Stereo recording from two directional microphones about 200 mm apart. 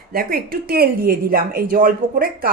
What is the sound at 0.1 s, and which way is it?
A woman's voice, 45° right (ahead or behind).